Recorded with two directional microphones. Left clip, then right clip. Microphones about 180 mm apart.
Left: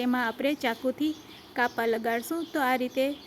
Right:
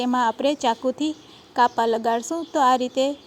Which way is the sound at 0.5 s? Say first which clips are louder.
Right 6 dB; 15° right (ahead or behind).